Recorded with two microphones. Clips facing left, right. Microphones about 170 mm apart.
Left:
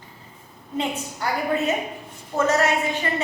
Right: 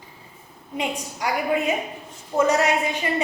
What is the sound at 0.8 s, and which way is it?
A woman's voice, 15° right (ahead or behind).